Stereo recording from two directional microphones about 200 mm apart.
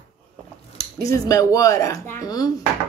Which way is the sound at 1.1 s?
15° left (ahead or behind).